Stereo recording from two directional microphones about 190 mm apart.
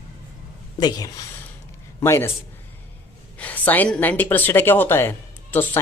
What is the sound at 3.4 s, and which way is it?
Speech, 10° left (ahead or behind).